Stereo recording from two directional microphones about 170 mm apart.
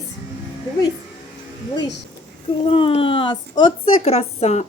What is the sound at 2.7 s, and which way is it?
Speech, 35° left (ahead or behind).